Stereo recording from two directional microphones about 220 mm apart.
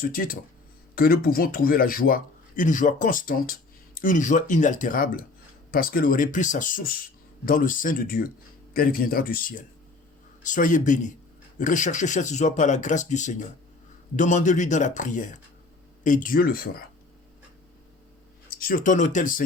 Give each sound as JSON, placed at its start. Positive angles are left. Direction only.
{"t": 0.0, "sound": "speech", "side_deg": 40}
{"t": 18.4, "sound": "speech", "side_deg": 40}